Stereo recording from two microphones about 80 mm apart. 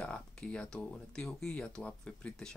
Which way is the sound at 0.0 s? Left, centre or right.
Centre.